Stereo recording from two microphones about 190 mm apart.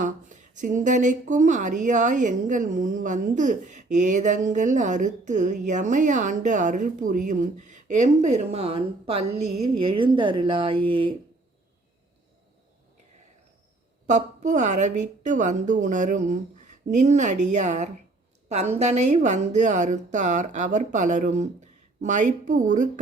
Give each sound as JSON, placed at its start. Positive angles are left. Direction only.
{"t": 0.0, "sound": "speech", "side_deg": -40}
{"t": 14.1, "sound": "speech", "side_deg": -40}